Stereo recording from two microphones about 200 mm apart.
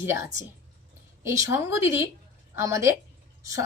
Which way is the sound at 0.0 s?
15° right (ahead or behind).